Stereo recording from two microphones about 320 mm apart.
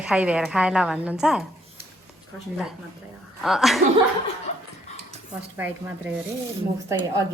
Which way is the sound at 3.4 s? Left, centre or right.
Centre.